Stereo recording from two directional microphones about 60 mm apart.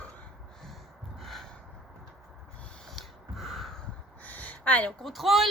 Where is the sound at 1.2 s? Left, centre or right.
Centre.